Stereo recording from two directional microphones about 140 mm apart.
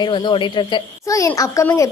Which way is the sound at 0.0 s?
30° left (ahead or behind).